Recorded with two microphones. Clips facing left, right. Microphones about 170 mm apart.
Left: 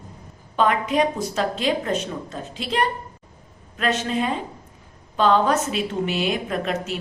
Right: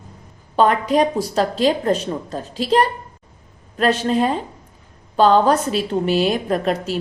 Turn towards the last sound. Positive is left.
turn(degrees=-35)  # may be behind; listen again after turning